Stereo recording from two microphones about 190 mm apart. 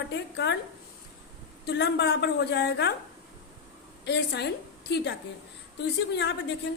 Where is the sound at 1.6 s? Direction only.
65° left (ahead or behind).